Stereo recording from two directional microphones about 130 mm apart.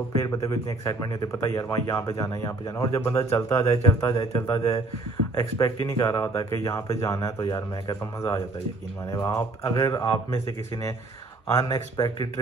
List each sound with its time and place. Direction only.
0.2 s speech: 25° left (ahead or behind)